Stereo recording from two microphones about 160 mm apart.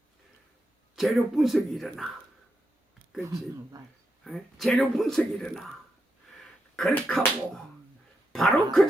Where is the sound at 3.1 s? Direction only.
20° right (ahead or behind).